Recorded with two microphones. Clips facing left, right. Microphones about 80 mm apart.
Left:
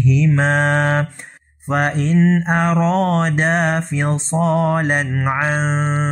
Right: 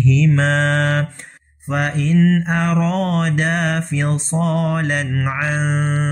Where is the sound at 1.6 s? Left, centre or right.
Left.